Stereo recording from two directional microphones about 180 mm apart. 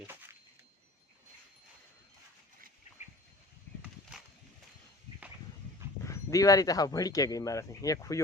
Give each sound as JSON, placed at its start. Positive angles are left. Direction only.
{"t": 6.1, "sound": "speech", "side_deg": 20}